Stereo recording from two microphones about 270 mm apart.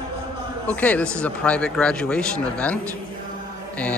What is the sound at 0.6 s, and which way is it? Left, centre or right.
A man's voice, centre.